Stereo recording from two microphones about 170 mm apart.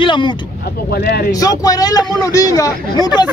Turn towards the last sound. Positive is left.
turn(degrees=25)  # may be behind; listen again after turning